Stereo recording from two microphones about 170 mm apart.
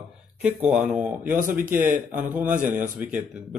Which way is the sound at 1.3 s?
55° right (ahead or behind).